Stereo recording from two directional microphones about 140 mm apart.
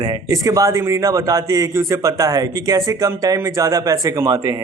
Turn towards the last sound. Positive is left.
turn(degrees=-25)  # may be behind; listen again after turning